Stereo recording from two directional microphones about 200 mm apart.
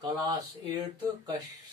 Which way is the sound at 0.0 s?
20° right (ahead or behind).